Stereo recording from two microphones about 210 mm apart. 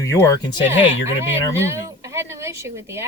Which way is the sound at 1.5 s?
10° right (ahead or behind).